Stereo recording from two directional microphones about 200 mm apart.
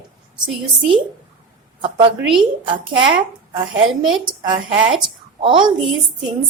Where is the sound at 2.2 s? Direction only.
5° right (ahead or behind).